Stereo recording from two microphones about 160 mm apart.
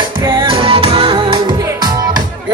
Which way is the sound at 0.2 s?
30° right (ahead or behind).